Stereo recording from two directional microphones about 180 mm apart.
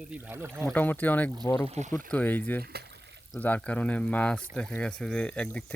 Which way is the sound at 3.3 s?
10° left (ahead or behind).